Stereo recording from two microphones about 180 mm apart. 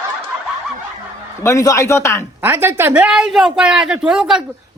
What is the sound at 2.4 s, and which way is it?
A man's voice, 10° right (ahead or behind).